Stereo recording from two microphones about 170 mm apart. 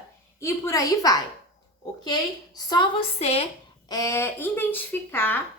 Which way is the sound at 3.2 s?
35° left (ahead or behind).